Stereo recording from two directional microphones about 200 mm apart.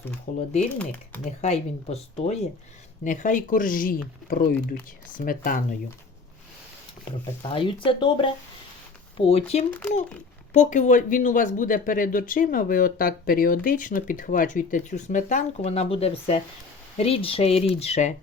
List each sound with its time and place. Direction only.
0.3 s speech: 35° left (ahead or behind)
7.1 s speech: 25° left (ahead or behind)
9.6 s a child's voice: 10° left (ahead or behind)
10.5 s speech: 40° left (ahead or behind)